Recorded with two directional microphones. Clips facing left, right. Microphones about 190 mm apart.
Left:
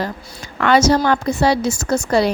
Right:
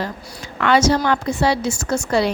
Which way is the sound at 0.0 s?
40° left (ahead or behind).